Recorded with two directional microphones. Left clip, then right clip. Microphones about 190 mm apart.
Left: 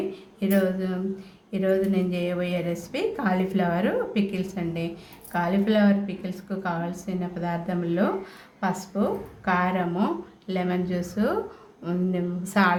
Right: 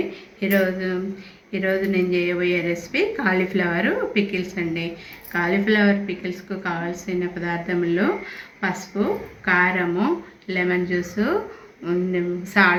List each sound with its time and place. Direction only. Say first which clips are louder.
0.3 s a woman's voice: right 4 dB; 70° left (ahead or behind)
9.4 s speech: right 6 dB; 60° left (ahead or behind)